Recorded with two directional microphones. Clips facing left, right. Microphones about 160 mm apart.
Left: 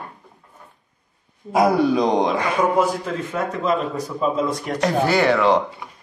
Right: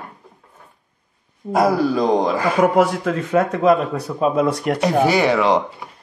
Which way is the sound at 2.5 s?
75° right (ahead or behind).